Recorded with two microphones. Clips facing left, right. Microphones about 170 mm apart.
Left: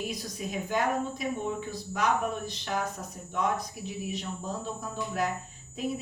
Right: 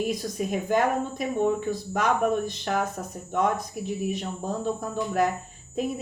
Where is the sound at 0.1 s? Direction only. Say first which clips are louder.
Right 7 dB; 50° right (ahead or behind).